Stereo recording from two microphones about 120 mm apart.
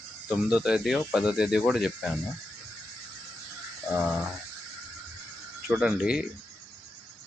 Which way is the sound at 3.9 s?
Centre (ahead or behind).